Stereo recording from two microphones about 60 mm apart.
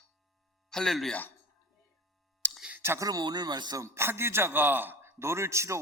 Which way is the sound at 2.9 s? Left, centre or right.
Right.